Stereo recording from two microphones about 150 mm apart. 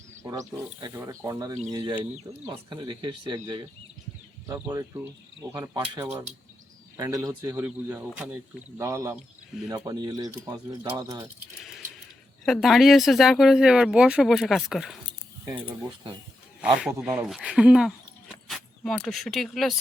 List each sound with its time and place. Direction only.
0.2 s speech: 20° right (ahead or behind)
4.7 s speech: 20° right (ahead or behind)
6.9 s speech: 20° right (ahead or behind)
12.5 s speech: centre (ahead or behind)
16.6 s speech: 10° right (ahead or behind)